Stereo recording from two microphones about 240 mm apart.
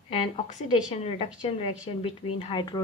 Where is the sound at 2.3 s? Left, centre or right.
Left.